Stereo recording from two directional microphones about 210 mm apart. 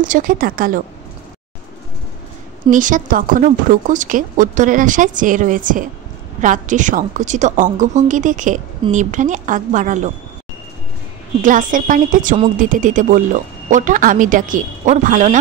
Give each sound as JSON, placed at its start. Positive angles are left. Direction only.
{"t": 0.0, "sound": "speech", "side_deg": -40}
{"t": 2.7, "sound": "speech", "side_deg": -40}
{"t": 11.4, "sound": "speech", "side_deg": -40}